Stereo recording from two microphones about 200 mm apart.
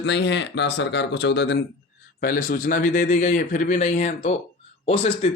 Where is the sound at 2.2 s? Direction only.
45° left (ahead or behind).